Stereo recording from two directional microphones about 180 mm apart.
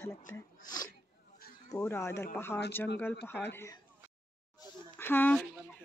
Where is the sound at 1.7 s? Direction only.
15° left (ahead or behind).